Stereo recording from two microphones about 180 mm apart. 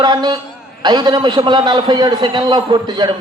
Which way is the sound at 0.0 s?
25° right (ahead or behind).